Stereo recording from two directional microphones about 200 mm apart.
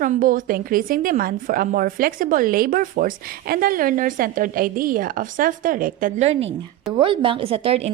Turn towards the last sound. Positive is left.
turn(degrees=-30)  # may be behind; listen again after turning